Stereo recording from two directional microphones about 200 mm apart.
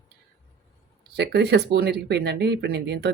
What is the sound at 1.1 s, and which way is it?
Speech, 55° right (ahead or behind).